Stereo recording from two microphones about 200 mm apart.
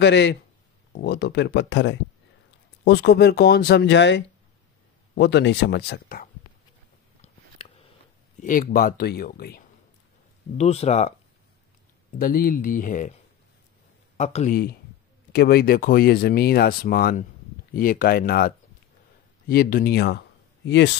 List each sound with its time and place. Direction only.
0.0 s speech: 60° left (ahead or behind)
7.2 s a sound: 35° left (ahead or behind)
8.4 s speech: 45° left (ahead or behind)
10.6 s speech: 30° left (ahead or behind)
12.2 s speech: 45° left (ahead or behind)
14.1 s speech: 35° left (ahead or behind); by 20.9 s 60° left (ahead or behind)